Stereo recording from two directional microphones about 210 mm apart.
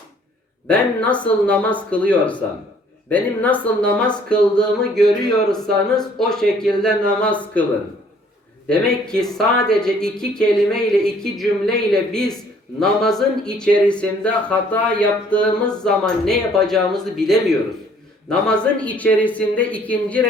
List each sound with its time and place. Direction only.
0.7 s speech: 5° left (ahead or behind)
8.6 s speech: 5° left (ahead or behind)